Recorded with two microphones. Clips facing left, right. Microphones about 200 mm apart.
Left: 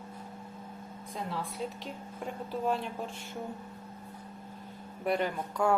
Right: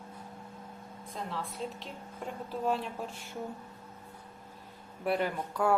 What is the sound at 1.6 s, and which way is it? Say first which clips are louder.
Speech: left 2 dB; 5° left (ahead or behind).